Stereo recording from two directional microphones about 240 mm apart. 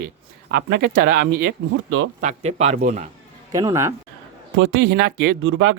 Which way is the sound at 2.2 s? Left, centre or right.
Right.